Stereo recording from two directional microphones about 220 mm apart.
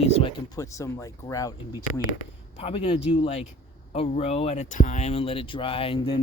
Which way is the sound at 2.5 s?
25° left (ahead or behind).